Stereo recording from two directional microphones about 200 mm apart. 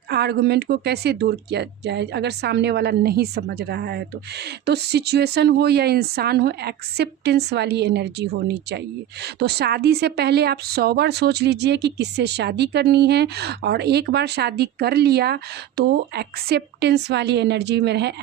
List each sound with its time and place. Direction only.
0.1 s a woman's voice: 55° right (ahead or behind)